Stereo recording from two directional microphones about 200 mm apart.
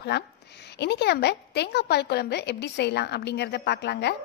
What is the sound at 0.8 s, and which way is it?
A woman's voice, 55° left (ahead or behind).